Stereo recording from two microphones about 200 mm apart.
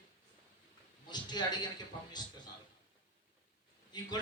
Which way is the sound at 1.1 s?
20° left (ahead or behind).